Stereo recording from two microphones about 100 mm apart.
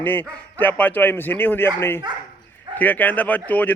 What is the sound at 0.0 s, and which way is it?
Speech, 20° left (ahead or behind).